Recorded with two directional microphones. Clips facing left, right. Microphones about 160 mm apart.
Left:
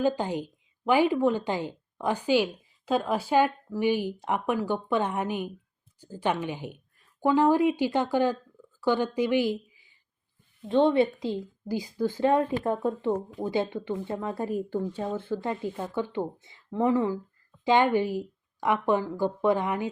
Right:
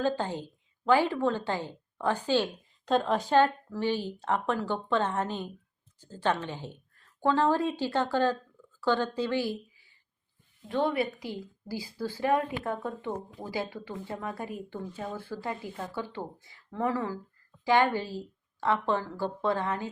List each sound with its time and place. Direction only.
0.0 s a woman's voice: 15° left (ahead or behind)
14.4 s speech: 40° left (ahead or behind)
15.0 s a woman's voice: 20° left (ahead or behind)